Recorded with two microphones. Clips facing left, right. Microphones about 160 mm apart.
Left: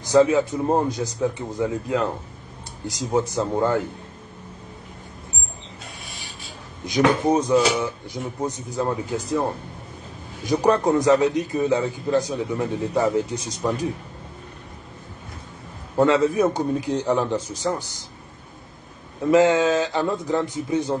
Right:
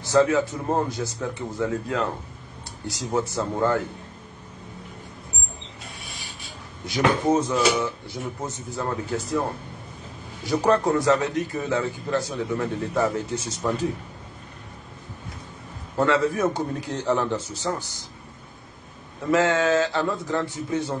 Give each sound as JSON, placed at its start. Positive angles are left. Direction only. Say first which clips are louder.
{"t": 0.0, "sound": "a man's voice", "louder": "left 3 dB", "side_deg": 15}
{"t": 3.1, "sound": "a man's voice", "louder": "left 3 dB", "side_deg": 15}
{"t": 6.9, "sound": "a man's voice", "louder": "left 2 dB", "side_deg": 15}
{"t": 10.4, "sound": "a man's voice", "louder": "left 2 dB", "side_deg": 15}
{"t": 16.0, "sound": "a man's voice", "louder": "left 4 dB", "side_deg": 20}
{"t": 19.3, "sound": "a man's voice", "louder": "left 3 dB", "side_deg": 15}